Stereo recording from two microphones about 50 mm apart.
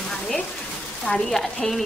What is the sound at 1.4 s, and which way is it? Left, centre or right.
Speech, centre.